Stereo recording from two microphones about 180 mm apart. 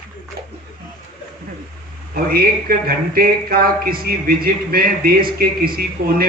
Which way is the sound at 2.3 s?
55° right (ahead or behind).